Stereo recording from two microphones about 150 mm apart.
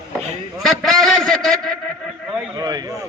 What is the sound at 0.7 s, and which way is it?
Speech, centre (ahead or behind).